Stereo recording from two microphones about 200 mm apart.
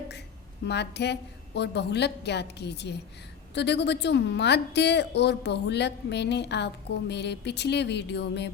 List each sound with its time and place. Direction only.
0.6 s a woman's voice: 60° left (ahead or behind)